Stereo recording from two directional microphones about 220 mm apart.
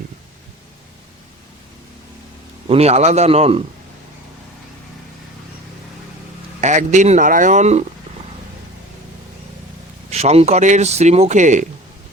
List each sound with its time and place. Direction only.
2.6 s speech: 30° right (ahead or behind)
6.6 s speech: 35° right (ahead or behind)
10.1 s speech: 30° right (ahead or behind)